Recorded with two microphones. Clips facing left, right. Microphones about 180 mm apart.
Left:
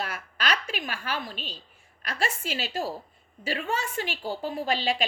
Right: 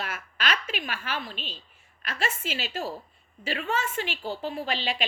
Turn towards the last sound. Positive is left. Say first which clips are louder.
# left 3 dB
turn(degrees=40)  # may be behind; listen again after turning